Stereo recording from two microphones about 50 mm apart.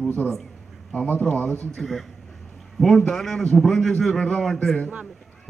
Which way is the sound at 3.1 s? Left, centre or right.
Centre.